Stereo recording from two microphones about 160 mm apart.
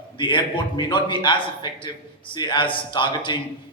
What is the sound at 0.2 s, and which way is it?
A man's voice, 30° left (ahead or behind).